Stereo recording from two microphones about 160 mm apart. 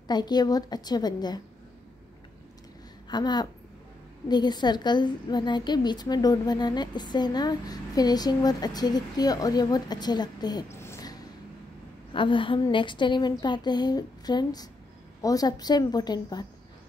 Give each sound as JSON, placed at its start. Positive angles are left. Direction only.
{"t": 0.1, "sound": "a woman's voice", "side_deg": 25}
{"t": 3.1, "sound": "a woman's voice", "side_deg": 25}
{"t": 12.1, "sound": "a woman's voice", "side_deg": 30}